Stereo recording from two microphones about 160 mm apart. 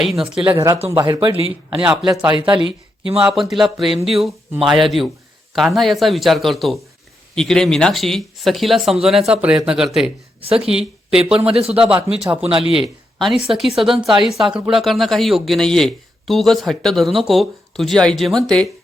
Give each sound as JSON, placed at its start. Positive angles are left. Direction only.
{"t": 0.0, "sound": "speech", "side_deg": 0}
{"t": 0.5, "sound": "speech", "side_deg": -20}
{"t": 1.4, "sound": "speech", "side_deg": -35}
{"t": 1.8, "sound": "speech", "side_deg": -5}
{"t": 2.4, "sound": "speech", "side_deg": -30}
{"t": 3.2, "sound": "speech", "side_deg": -5}
{"t": 10.4, "sound": "speech", "side_deg": -35}
{"t": 10.7, "sound": "speech", "side_deg": -5}
{"t": 11.4, "sound": "speech", "side_deg": -40}
{"t": 12.1, "sound": "speech", "side_deg": -5}